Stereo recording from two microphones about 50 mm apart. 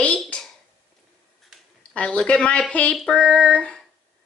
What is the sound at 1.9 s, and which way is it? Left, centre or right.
Speech, left.